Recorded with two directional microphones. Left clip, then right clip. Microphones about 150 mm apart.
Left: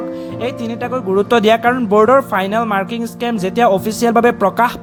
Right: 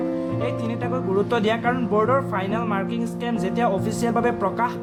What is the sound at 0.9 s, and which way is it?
Speech, 40° left (ahead or behind).